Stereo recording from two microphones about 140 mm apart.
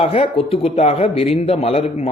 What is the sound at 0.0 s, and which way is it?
A man's voice, 40° left (ahead or behind).